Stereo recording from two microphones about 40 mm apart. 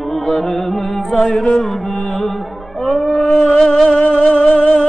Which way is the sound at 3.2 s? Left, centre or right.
Left.